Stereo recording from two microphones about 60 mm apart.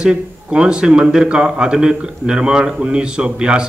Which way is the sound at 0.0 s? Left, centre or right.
Centre.